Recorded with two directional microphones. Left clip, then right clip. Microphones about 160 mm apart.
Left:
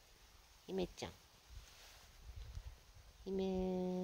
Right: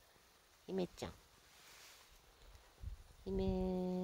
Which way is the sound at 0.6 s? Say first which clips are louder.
Even; 20° right (ahead or behind).